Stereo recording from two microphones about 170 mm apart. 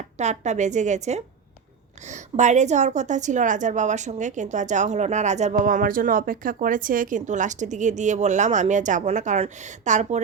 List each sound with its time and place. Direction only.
0.2 s a woman's voice: 45° right (ahead or behind)